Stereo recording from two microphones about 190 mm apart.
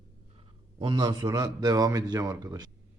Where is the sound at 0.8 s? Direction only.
25° right (ahead or behind).